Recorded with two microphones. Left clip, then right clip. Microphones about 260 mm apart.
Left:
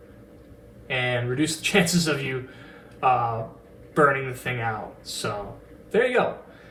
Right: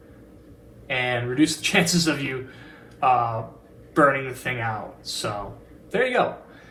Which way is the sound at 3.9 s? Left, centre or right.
Right.